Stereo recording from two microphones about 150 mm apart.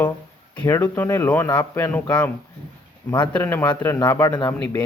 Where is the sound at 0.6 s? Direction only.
15° left (ahead or behind).